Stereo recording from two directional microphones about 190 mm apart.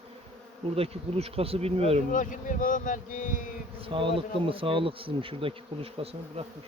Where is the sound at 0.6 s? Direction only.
30° right (ahead or behind).